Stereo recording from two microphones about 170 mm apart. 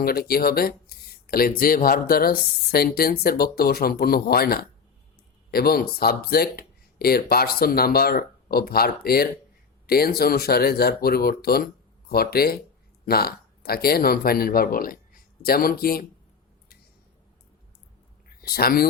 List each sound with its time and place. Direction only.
0.0 s speech: 65° left (ahead or behind)
18.4 s speech: 65° left (ahead or behind)